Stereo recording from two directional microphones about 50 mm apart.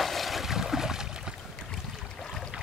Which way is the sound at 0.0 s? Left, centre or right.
Centre.